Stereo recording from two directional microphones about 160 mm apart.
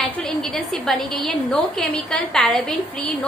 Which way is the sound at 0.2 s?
5° left (ahead or behind).